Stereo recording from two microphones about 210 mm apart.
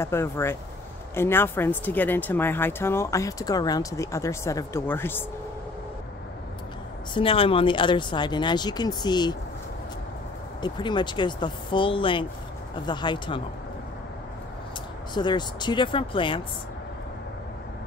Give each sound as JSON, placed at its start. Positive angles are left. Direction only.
{"t": 0.0, "sound": "speech", "side_deg": 10}
{"t": 7.2, "sound": "speech", "side_deg": 25}
{"t": 10.6, "sound": "speech", "side_deg": 20}
{"t": 15.1, "sound": "speech", "side_deg": 20}